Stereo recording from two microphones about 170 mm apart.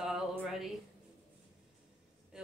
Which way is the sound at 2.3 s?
5° right (ahead or behind).